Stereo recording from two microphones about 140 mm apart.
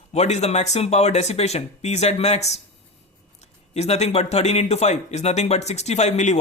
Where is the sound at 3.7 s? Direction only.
50° left (ahead or behind).